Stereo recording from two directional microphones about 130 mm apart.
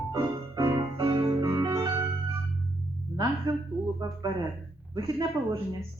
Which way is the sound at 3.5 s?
30° right (ahead or behind).